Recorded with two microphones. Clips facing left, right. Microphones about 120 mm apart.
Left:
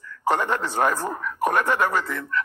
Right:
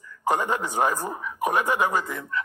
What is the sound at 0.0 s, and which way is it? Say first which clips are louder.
Speech: left 1 dB; 15° right (ahead or behind).